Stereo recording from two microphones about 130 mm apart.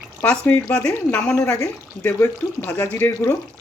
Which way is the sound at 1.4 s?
20° left (ahead or behind).